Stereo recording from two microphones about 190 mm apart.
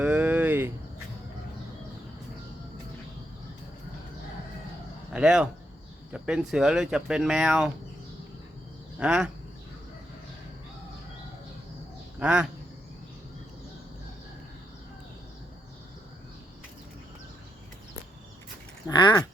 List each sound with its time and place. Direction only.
0.0 s a sound: 10° right (ahead or behind)
5.1 s speech: 5° right (ahead or behind)
9.0 s speech: 5° right (ahead or behind)
12.2 s speech: 5° right (ahead or behind)
18.9 s speech: 20° left (ahead or behind)